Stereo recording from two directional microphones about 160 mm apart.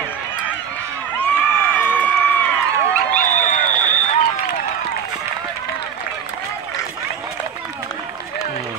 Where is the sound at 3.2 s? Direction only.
55° left (ahead or behind).